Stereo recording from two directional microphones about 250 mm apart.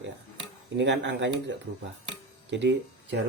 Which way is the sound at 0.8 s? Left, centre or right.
Right.